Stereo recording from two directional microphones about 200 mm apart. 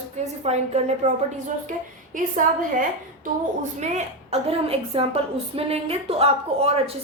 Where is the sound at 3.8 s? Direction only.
35° right (ahead or behind).